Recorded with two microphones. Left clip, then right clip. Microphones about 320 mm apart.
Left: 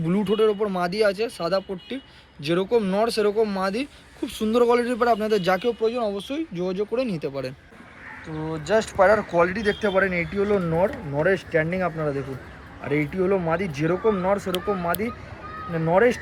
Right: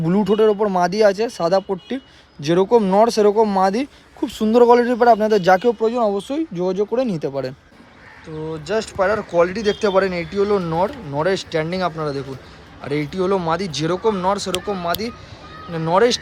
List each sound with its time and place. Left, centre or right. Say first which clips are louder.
0.0 s a man's voice: right 5 dB; right
8.4 s speech: even; centre